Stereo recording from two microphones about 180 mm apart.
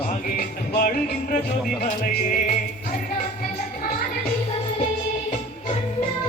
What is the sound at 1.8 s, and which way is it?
Music, 50° left (ahead or behind).